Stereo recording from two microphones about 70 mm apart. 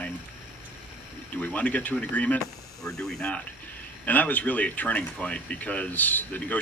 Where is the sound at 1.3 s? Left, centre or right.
Left.